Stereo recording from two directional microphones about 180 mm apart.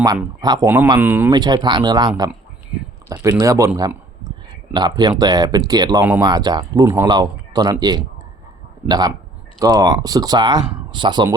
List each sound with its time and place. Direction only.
0.4 s speech: 25° right (ahead or behind)
0.9 s speech: 10° right (ahead or behind)
1.3 s speech: 25° right (ahead or behind)
3.8 s a sound: 20° right (ahead or behind)
4.7 s speech: 25° right (ahead or behind)